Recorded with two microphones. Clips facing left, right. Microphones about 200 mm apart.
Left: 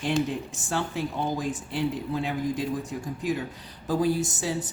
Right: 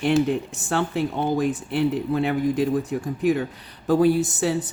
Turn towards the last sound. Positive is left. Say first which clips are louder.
# right 6 dB
turn(degrees=-65)  # may be behind; listen again after turning